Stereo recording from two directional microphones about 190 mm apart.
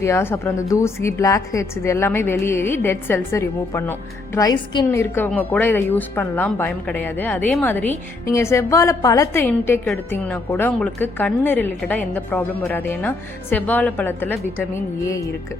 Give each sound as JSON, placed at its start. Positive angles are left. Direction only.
{"t": 0.0, "sound": "a woman's voice", "side_deg": 15}